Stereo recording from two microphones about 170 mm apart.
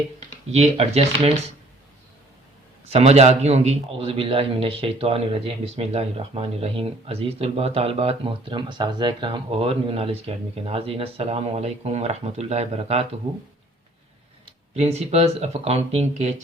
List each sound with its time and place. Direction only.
0.5 s a man's voice: 40° right (ahead or behind)
2.9 s a man's voice: 40° right (ahead or behind)
14.7 s a man's voice: 40° right (ahead or behind)